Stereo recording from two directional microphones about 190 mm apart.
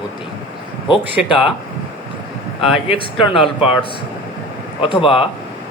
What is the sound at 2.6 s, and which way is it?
Speech, 30° left (ahead or behind).